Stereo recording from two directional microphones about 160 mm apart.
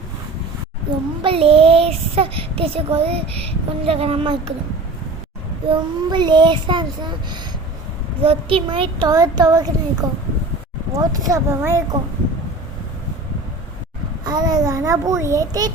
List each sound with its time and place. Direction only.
1.2 s speech: 35° right (ahead or behind)
5.6 s a child's voice: 30° right (ahead or behind)
14.3 s a child's voice: 25° right (ahead or behind)